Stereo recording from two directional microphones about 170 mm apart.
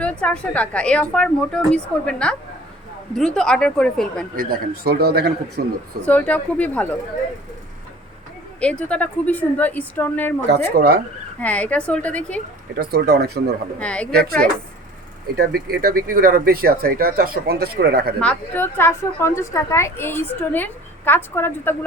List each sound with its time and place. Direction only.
0.0 s a woman's voice: 10° left (ahead or behind)
4.4 s speech: 60° right (ahead or behind)
6.1 s a woman's voice: 10° left (ahead or behind)
8.6 s a woman's voice: 5° left (ahead or behind)
10.5 s speech: 65° right (ahead or behind)
11.3 s a woman's voice: 10° left (ahead or behind)
12.7 s speech: 65° right (ahead or behind)
13.7 s a woman's voice: 5° left (ahead or behind)
14.1 s speech: 65° right (ahead or behind)
15.4 s speech: 65° right (ahead or behind)
18.2 s a woman's voice: 10° left (ahead or behind)